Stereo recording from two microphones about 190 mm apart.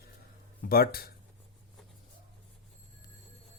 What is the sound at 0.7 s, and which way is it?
Speech, 50° left (ahead or behind).